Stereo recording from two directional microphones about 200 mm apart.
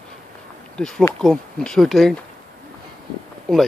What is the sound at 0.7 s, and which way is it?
Speech, 5° left (ahead or behind).